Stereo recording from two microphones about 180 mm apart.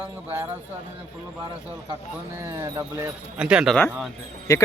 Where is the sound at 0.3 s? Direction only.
10° right (ahead or behind).